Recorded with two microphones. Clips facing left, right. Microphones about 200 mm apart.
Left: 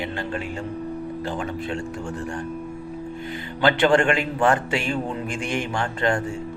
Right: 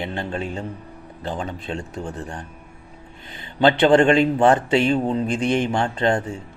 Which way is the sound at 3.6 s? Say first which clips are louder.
Right 4 dB; 25° right (ahead or behind).